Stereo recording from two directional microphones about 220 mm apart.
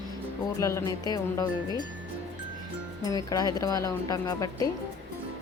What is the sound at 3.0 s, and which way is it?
Speech, 15° left (ahead or behind).